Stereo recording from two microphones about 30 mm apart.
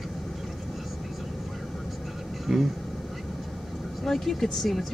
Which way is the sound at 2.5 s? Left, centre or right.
Centre.